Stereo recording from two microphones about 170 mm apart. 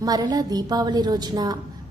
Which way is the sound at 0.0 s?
25° right (ahead or behind).